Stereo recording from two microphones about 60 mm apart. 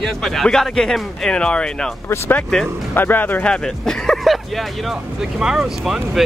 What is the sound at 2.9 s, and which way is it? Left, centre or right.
Speech, left.